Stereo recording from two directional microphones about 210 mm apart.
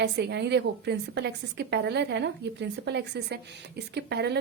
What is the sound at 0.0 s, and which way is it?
A woman's voice, 50° right (ahead or behind).